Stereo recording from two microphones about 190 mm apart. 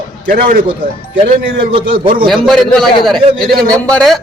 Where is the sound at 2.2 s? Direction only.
Centre (ahead or behind).